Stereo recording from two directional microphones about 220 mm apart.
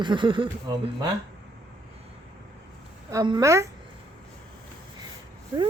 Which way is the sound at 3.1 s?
20° right (ahead or behind).